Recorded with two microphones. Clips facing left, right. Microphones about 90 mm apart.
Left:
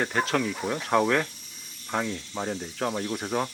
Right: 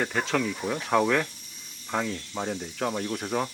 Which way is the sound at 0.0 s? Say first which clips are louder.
Left 1 dB; centre (ahead or behind).